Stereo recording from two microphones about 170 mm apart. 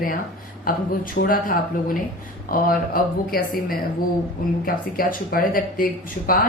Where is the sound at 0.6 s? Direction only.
55° left (ahead or behind).